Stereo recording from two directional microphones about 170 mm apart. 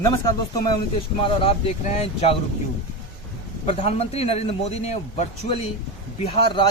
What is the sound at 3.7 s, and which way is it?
A man's voice, 35° left (ahead or behind).